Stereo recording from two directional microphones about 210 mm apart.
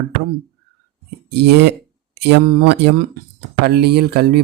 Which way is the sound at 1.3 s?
55° right (ahead or behind).